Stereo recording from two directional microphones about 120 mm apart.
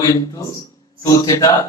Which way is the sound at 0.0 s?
25° left (ahead or behind).